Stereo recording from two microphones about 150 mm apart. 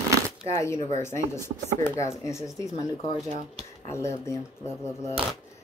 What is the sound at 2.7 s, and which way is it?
Speech, 45° left (ahead or behind).